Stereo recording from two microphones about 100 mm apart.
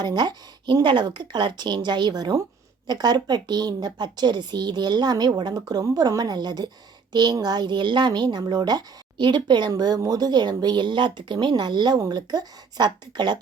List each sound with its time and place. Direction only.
0.0 s speech: 45° right (ahead or behind)